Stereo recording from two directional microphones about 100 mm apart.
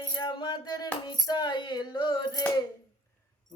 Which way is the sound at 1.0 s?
45° left (ahead or behind).